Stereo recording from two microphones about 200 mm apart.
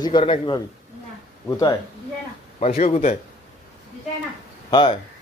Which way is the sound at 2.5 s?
35° left (ahead or behind).